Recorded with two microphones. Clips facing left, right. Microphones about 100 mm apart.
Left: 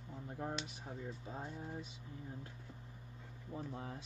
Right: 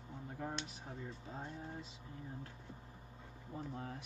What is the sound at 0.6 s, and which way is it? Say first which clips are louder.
Speech: left 1 dB; 5° left (ahead or behind).